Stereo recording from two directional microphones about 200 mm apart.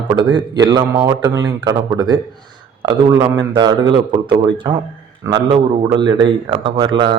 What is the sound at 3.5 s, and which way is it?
A man's voice, 20° right (ahead or behind).